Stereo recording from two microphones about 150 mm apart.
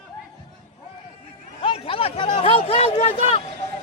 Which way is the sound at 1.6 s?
40° left (ahead or behind).